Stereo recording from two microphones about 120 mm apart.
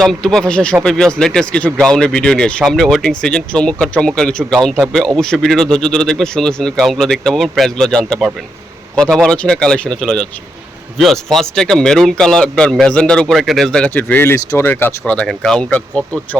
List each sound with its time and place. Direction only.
0.0 s a man's voice: 5° left (ahead or behind)